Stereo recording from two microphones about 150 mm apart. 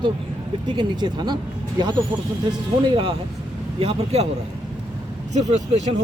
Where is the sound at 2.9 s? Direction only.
35° right (ahead or behind).